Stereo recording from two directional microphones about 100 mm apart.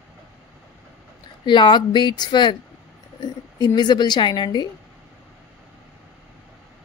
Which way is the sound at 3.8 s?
45° left (ahead or behind).